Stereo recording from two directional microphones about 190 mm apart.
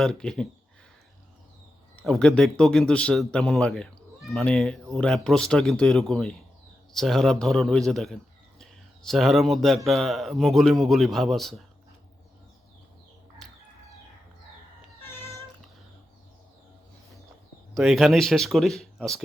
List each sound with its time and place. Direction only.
0.0 s speech: 5° left (ahead or behind)
2.0 s speech: 5° left (ahead or behind)
17.7 s speech: centre (ahead or behind)